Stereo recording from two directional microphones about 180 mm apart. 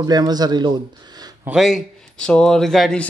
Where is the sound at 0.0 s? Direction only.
20° right (ahead or behind).